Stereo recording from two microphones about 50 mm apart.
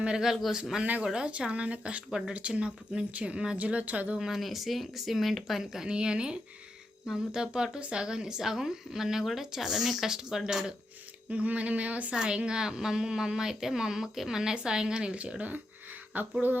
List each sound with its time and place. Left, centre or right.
0.0 s speech: centre; by 4.2 s right
4.2 s speech: centre
11.3 s speech: right
12.1 s speech: centre; by 16.3 s right